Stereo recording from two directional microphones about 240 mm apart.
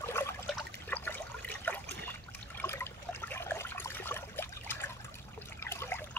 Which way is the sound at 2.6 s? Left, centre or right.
Centre.